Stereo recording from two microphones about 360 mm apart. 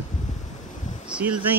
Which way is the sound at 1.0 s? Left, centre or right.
Centre.